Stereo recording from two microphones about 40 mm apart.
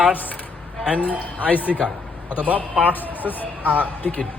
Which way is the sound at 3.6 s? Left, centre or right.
Right.